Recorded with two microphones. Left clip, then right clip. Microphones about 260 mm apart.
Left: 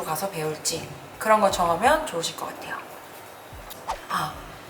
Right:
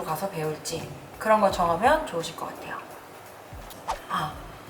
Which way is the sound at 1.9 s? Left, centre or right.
Centre.